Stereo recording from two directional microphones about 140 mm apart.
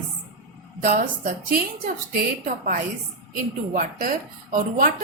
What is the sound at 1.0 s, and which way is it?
Speech, 80° right.